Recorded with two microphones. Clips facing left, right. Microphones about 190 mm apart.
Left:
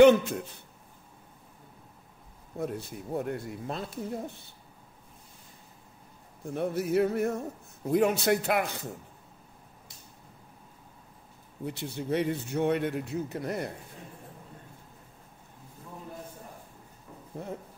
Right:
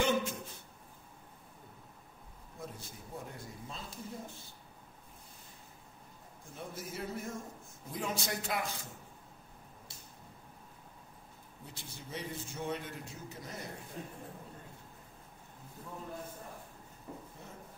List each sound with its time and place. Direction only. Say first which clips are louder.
0.0 s speech: left 14 dB; 65° left (ahead or behind)
2.5 s speech: left 13 dB; 65° left (ahead or behind)
6.4 s speech: left 15 dB; 65° left (ahead or behind)
11.6 s speech: left 16 dB; 65° left (ahead or behind)